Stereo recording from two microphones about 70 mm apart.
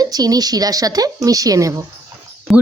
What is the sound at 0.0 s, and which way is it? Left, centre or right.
Speech, right.